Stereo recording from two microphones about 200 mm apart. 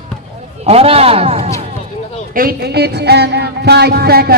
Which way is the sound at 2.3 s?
50° right (ahead or behind).